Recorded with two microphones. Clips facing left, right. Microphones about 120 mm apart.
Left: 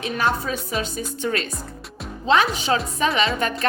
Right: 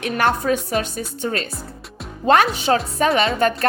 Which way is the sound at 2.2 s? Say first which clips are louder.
Right 3 dB; 50° right (ahead or behind).